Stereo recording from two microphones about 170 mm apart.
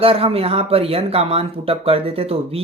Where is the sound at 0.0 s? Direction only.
35° right (ahead or behind).